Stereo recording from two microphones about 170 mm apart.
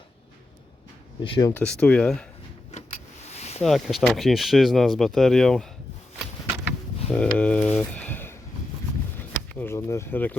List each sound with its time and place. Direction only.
1.2 s speech: 30° left (ahead or behind)
1.6 s speech: 5° left (ahead or behind)
2.7 s vehicle: 40° left (ahead or behind)
3.6 s speech: centre (ahead or behind)
7.1 s a sound: 5° left (ahead or behind)
9.6 s speech: 15° left (ahead or behind)